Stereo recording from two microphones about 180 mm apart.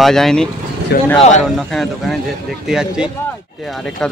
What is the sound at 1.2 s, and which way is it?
Speech, 40° left (ahead or behind).